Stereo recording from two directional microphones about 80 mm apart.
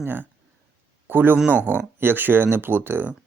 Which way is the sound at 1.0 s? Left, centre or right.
Right.